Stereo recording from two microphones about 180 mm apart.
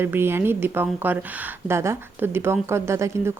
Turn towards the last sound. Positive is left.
turn(degrees=-15)  # may be behind; listen again after turning